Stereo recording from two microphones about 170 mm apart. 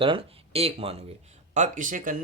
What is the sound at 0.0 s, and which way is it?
Speech, 30° right (ahead or behind).